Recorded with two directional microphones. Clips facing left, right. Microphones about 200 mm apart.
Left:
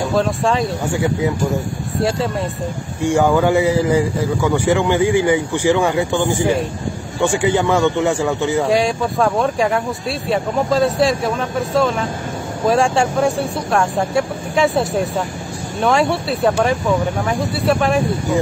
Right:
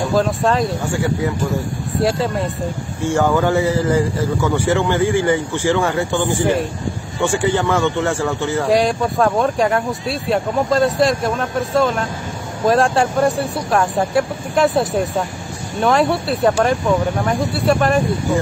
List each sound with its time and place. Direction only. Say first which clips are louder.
0.1 s speech: right 1 dB; centre (ahead or behind)
0.9 s speech: left 3 dB; 20° left (ahead or behind)
2.0 s speech: right 1 dB; centre (ahead or behind)
3.0 s speech: left 2 dB; 15° left (ahead or behind)
8.6 s speech: right 1 dB; centre (ahead or behind)